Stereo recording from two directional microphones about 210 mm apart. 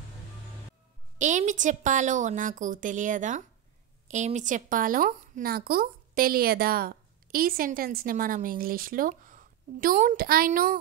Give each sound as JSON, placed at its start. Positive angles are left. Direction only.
{"t": 1.1, "sound": "a woman's voice", "side_deg": -35}